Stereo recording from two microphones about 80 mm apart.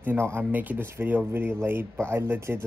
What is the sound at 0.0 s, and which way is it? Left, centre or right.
Speech, right.